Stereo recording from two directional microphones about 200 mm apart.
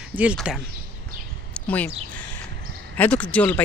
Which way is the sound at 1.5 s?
10° left (ahead or behind).